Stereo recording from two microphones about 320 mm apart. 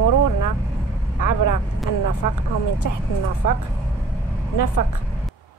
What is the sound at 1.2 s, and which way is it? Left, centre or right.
Speech, left.